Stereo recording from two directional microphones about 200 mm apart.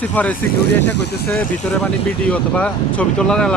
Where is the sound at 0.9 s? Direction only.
55° left (ahead or behind).